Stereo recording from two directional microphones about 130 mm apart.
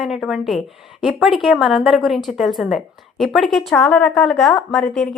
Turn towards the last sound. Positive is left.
turn(degrees=5)  # may be behind; listen again after turning